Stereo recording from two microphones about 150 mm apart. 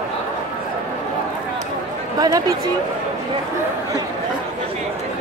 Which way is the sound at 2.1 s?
25° right (ahead or behind).